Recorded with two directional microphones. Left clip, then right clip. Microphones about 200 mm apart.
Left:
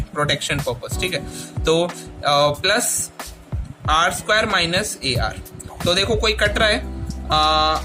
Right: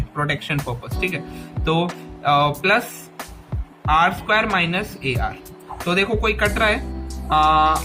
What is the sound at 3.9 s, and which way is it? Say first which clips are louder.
A woman's voice: even; 45° left (ahead or behind).